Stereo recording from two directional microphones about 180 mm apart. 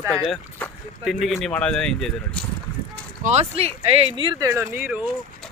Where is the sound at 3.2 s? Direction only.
35° right (ahead or behind); by 5.1 s 10° right (ahead or behind).